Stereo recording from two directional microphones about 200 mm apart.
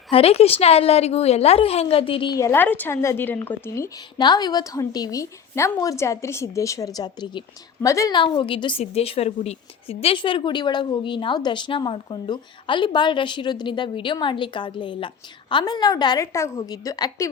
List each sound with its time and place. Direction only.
0.1 s a woman's voice: 30° left (ahead or behind)